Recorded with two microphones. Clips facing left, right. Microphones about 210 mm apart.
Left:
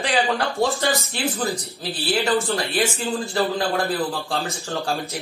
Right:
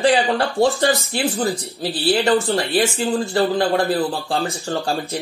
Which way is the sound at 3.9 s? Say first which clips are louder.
Right 4 dB; 30° right (ahead or behind).